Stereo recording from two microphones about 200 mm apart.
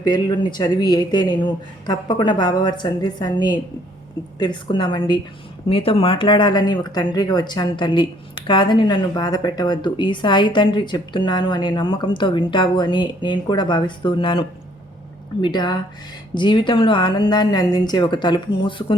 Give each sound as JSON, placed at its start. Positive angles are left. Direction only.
{"t": 0.0, "sound": "speech", "side_deg": 20}